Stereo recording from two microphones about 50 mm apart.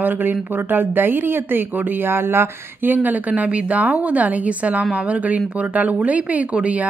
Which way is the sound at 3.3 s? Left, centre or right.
Right.